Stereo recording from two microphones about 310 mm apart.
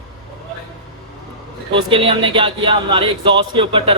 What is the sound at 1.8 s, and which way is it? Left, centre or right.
A man's voice, centre.